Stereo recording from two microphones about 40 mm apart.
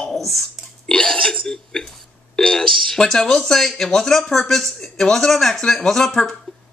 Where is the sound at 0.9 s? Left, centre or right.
Centre.